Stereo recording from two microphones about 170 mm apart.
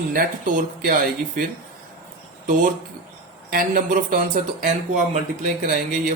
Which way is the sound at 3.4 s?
50° right (ahead or behind).